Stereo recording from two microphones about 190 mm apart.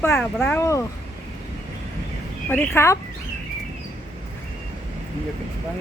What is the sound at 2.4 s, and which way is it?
Speech, 10° left (ahead or behind).